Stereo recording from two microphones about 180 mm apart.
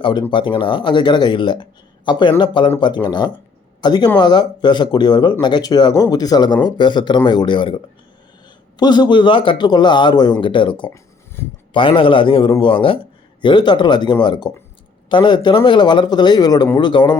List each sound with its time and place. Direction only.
0.0 s speech: 25° left (ahead or behind)
8.8 s speech: 25° left (ahead or behind)
11.4 s speech: 15° left (ahead or behind)
11.7 s speech: 30° left (ahead or behind)